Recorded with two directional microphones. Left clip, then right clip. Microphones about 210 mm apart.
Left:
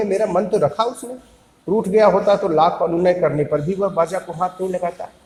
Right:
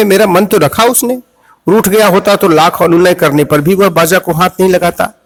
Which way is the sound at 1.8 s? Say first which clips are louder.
Right 4 dB; 40° right (ahead or behind).